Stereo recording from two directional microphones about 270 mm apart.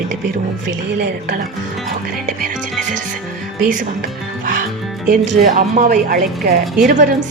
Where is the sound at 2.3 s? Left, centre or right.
Right.